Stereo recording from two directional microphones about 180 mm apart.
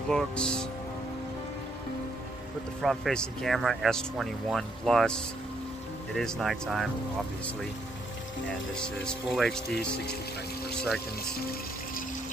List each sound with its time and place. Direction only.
0.1 s speech: 5° left (ahead or behind)
2.8 s speech: centre (ahead or behind)
6.1 s speech: centre (ahead or behind)
8.7 s speech: 5° left (ahead or behind)